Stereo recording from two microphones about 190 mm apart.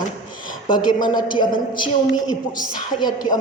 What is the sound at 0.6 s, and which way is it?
A man's voice, 25° left (ahead or behind).